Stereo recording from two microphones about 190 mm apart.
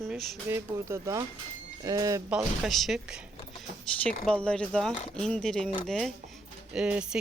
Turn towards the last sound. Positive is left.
turn(degrees=-5)  # may be behind; listen again after turning